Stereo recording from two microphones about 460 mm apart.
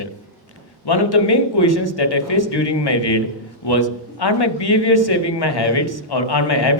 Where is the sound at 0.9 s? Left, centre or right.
Left.